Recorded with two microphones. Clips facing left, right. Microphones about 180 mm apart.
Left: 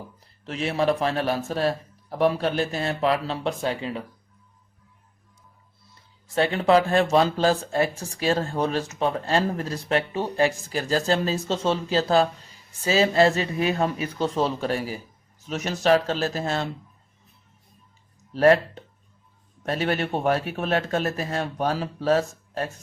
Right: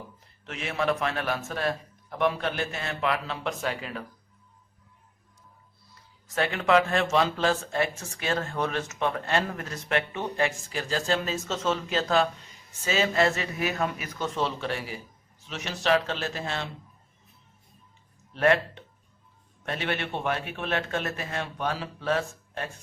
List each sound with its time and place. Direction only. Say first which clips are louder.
0.4 s speech: left 5 dB; 35° left (ahead or behind)
6.2 s speech: left 5 dB; 30° left (ahead or behind)
18.3 s speech: left 6 dB; 35° left (ahead or behind)